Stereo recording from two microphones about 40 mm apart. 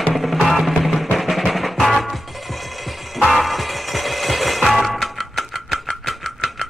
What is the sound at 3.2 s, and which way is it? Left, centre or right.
Music, centre.